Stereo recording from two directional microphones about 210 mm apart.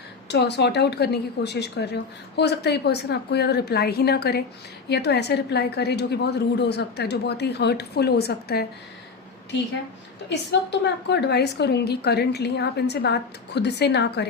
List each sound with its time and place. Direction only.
0.3 s a woman's voice: 55° left (ahead or behind)
10.2 s a woman's voice: 55° left (ahead or behind)